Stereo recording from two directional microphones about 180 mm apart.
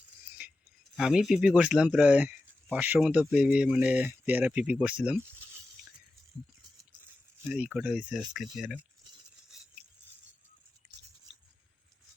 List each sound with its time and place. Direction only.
0.9 s speech: centre (ahead or behind)
7.4 s speech: 5° right (ahead or behind)